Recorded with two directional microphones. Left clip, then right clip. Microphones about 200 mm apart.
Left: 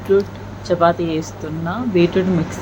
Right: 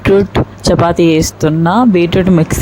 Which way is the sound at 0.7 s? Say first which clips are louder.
Right 6 dB; 55° right (ahead or behind).